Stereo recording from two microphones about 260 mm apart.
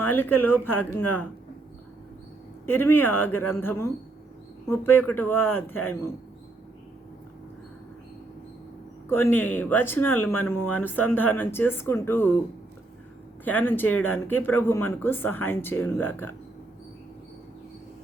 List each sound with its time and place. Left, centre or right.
0.1 s speech: centre
2.6 s speech: centre
9.0 s speech: centre
13.4 s speech: centre
13.8 s speech: left
14.1 s speech: centre